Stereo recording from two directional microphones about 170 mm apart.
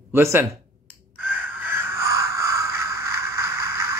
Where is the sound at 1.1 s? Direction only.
10° right (ahead or behind).